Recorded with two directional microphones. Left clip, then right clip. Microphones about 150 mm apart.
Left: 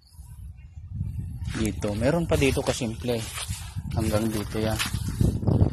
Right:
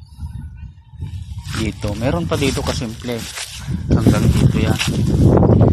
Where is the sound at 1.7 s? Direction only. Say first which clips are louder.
Right 3 dB; 45° left (ahead or behind).